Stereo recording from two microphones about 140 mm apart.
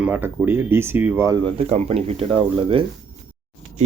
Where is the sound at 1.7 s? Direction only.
50° right (ahead or behind).